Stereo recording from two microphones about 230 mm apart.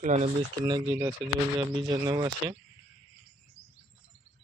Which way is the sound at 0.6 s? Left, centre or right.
Centre.